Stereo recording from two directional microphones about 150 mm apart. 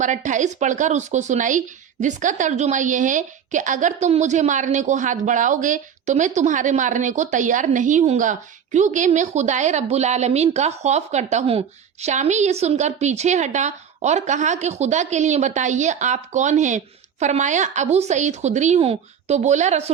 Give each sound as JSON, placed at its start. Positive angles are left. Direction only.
{"t": 0.0, "sound": "speech", "side_deg": -55}